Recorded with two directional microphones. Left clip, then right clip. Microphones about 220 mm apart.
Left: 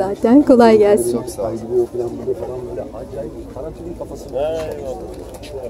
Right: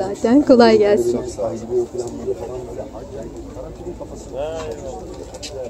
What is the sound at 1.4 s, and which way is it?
Speech, 45° left (ahead or behind).